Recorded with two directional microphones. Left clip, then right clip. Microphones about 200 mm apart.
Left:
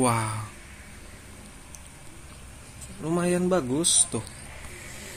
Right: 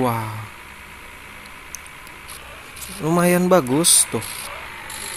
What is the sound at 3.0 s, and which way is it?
Speech, 30° right (ahead or behind).